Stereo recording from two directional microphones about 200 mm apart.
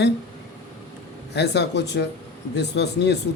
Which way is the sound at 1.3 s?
60° left (ahead or behind).